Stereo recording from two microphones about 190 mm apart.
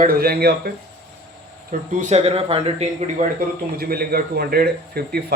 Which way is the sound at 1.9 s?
40° right (ahead or behind).